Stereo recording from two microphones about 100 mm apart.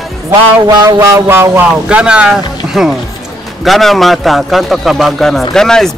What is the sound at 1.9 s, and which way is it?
Speech, 10° right (ahead or behind).